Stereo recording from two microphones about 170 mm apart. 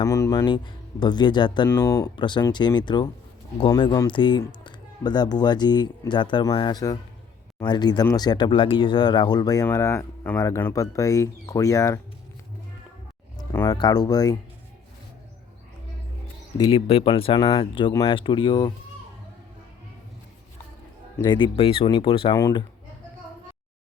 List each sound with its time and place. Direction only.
0.0 s speech: 20° left (ahead or behind)
1.6 s speech: 15° left (ahead or behind)
2.1 s speech: 25° left (ahead or behind)
13.5 s speech: 15° left (ahead or behind)
13.7 s speech: 25° left (ahead or behind)
16.6 s speech: 35° left (ahead or behind)
21.2 s speech: 30° left (ahead or behind)
22.4 s speech: 20° left (ahead or behind)